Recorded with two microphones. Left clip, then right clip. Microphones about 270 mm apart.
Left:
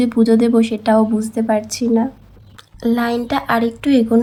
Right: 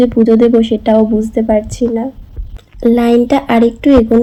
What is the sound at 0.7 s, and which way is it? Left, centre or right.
Speech, left.